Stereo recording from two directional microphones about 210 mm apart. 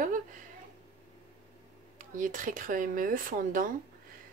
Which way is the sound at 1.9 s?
40° right (ahead or behind).